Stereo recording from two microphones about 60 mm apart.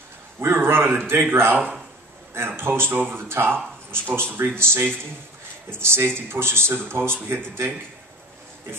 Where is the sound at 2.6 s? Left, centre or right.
Right.